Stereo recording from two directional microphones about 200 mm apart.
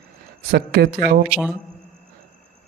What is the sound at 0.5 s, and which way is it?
Speech, 50° right (ahead or behind).